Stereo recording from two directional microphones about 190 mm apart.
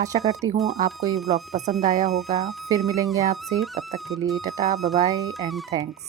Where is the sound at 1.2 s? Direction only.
35° right (ahead or behind).